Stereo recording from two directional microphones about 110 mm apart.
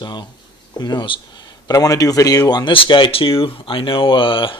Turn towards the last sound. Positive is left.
turn(degrees=50)  # may be behind; listen again after turning